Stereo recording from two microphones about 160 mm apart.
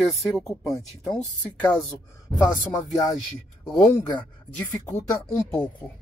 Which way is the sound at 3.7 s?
25° left (ahead or behind).